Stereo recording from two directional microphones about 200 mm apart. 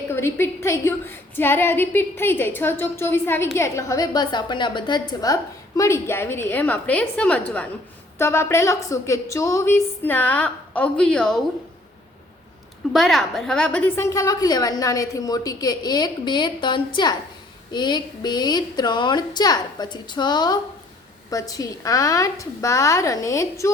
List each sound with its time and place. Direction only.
0.1 s a woman's voice: 10° left (ahead or behind)
12.9 s a woman's voice: centre (ahead or behind)